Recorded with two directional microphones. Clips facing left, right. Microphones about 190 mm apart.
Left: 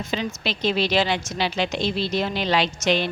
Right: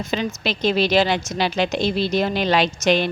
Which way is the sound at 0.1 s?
45° right (ahead or behind).